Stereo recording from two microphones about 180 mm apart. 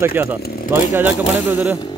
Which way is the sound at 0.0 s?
10° right (ahead or behind).